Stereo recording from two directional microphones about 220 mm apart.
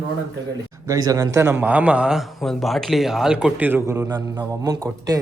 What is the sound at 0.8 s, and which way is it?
A man's voice, 15° right (ahead or behind).